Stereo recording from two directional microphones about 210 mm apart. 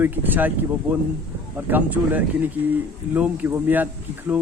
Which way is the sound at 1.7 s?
10° right (ahead or behind).